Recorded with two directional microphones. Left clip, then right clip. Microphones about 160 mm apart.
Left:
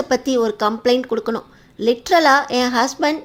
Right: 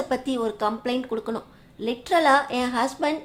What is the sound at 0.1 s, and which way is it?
A woman's voice, 25° left (ahead or behind).